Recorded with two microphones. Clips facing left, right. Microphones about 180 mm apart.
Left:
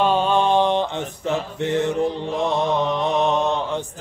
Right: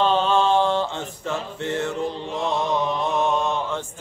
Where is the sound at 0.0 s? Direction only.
10° left (ahead or behind).